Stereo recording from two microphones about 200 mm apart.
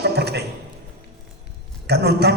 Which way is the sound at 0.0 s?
55° right (ahead or behind).